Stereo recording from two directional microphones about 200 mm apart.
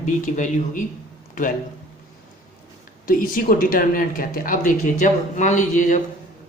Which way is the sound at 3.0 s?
45° left (ahead or behind).